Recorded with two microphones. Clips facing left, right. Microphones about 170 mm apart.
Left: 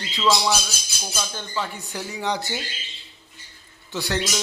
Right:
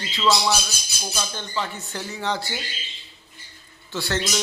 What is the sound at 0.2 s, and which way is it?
Speech, centre (ahead or behind).